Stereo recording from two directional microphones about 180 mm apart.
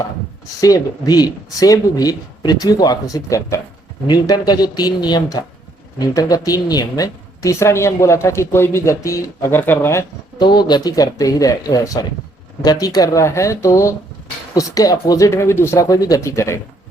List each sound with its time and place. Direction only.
0.6 s a woman's voice: 20° left (ahead or behind)